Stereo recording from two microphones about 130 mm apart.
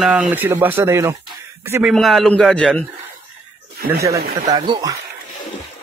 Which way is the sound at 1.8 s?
Centre (ahead or behind).